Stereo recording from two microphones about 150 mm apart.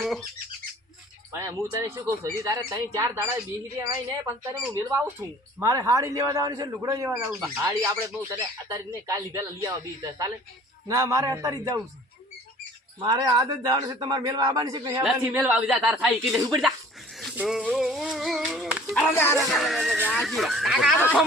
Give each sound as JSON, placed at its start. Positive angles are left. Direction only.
{"t": 0.0, "sound": "squeak", "side_deg": 0}
{"t": 1.3, "sound": "speech", "side_deg": -20}
{"t": 13.0, "sound": "speech", "side_deg": -30}
{"t": 15.3, "sound": "speech", "side_deg": -10}
{"t": 19.1, "sound": "speech", "side_deg": 15}
{"t": 19.4, "sound": "speech", "side_deg": 0}